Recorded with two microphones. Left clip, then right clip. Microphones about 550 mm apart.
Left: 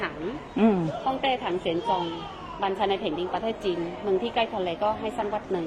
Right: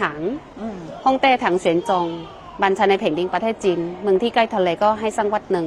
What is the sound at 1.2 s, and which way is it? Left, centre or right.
Speech, right.